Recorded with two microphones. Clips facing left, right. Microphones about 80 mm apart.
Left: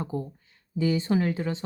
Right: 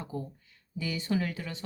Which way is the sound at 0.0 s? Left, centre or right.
Left.